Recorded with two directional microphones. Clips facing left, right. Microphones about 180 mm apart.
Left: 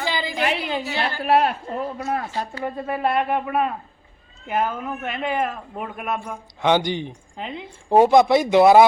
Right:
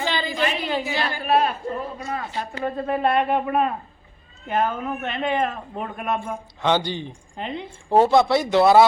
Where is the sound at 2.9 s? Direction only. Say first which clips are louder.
Right 1 dB; 5° left (ahead or behind).